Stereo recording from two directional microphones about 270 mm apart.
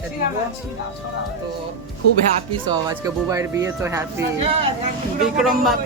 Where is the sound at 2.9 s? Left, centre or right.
Centre.